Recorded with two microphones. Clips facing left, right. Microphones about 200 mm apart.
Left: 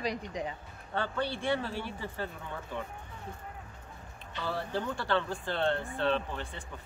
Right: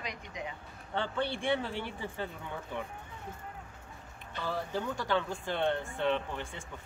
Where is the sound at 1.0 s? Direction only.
20° right (ahead or behind).